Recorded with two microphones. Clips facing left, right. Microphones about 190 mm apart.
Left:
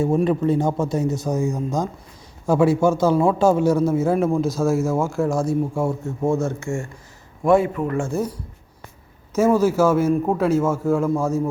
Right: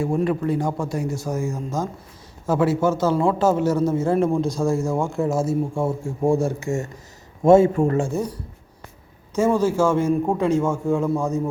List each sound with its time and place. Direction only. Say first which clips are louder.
0.0 s a man's voice: left 3 dB; 20° left (ahead or behind); by 7.7 s 25° right (ahead or behind)
8.1 s a man's voice: left 1 dB; 5° left (ahead or behind)